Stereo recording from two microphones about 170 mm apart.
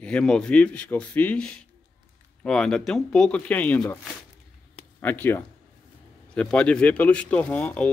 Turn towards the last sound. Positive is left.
turn(degrees=5)  # may be behind; listen again after turning